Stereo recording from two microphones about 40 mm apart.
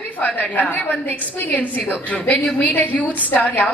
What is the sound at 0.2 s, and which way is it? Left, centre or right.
A woman's voice, left.